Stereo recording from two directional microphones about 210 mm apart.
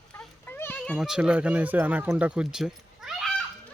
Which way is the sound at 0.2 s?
10° left (ahead or behind).